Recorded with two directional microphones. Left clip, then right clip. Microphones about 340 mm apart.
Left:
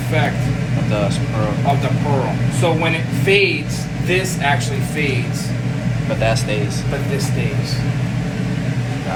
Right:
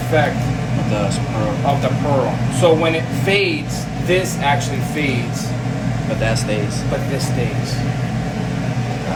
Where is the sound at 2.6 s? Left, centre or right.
Centre.